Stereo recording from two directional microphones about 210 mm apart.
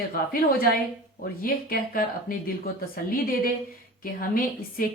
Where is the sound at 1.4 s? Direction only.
45° left (ahead or behind).